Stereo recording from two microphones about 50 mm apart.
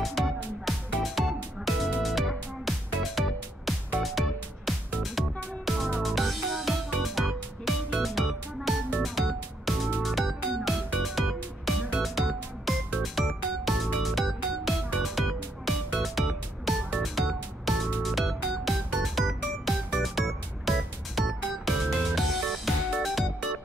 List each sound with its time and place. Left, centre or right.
0.0 s music: centre